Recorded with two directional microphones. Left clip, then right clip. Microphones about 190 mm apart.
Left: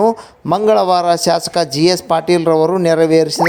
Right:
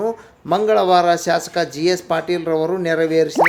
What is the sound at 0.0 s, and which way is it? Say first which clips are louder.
A man's voice: left 9 dB; 35° left (ahead or behind).